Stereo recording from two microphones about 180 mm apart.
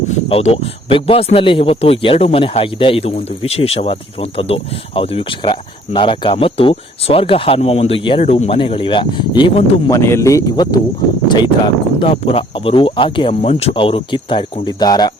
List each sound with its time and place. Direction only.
0.3 s speech: 35° left (ahead or behind)